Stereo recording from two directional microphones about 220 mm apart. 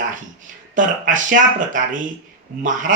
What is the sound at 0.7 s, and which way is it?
Speech, 35° right (ahead or behind).